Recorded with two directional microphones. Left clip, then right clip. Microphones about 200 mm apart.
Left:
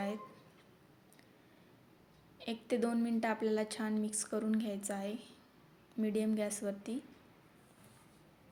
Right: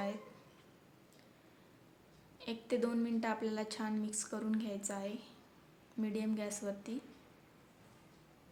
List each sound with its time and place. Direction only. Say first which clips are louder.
2.4 s a woman's voice: left 1 dB; 15° left (ahead or behind)